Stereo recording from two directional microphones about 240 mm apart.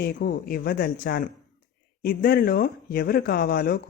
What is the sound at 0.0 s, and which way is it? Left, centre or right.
Speech, left.